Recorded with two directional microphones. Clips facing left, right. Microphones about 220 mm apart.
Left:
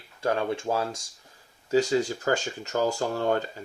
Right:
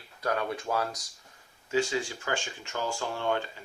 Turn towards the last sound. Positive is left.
turn(degrees=40)  # may be behind; listen again after turning